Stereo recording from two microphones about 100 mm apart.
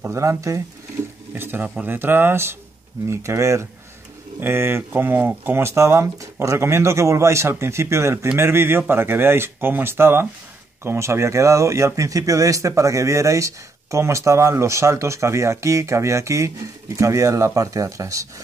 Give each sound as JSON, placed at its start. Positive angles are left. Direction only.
{"t": 0.0, "sound": "speech", "side_deg": -25}
{"t": 1.3, "sound": "speech", "side_deg": -20}